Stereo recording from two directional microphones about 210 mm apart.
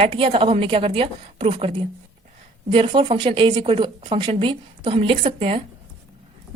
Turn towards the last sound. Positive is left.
turn(degrees=-30)  # may be behind; listen again after turning